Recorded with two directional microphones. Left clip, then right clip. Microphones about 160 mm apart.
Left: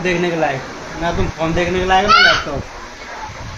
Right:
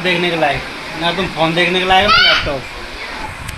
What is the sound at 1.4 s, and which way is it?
Speech, 10° right (ahead or behind).